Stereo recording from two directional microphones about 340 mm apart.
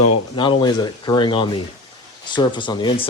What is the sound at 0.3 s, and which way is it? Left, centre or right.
Speech, centre.